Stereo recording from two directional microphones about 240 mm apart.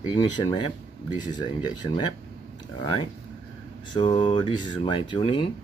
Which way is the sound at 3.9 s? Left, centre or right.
Centre.